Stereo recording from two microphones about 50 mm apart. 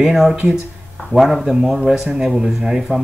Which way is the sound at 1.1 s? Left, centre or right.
Centre.